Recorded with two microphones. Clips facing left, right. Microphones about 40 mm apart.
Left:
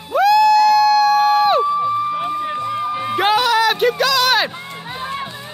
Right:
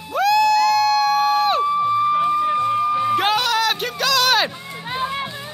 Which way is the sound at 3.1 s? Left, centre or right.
Centre.